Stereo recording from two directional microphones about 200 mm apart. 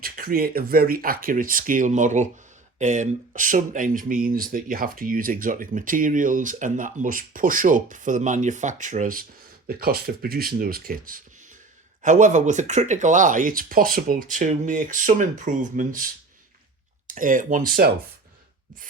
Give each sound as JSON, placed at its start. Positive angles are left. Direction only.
{"t": 0.0, "sound": "speech", "side_deg": -45}
{"t": 17.1, "sound": "speech", "side_deg": -40}